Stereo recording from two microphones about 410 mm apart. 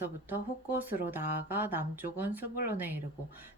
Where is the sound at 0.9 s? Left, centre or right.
Centre.